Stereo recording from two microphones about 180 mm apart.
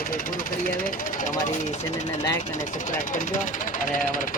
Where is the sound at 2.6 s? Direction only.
45° left (ahead or behind).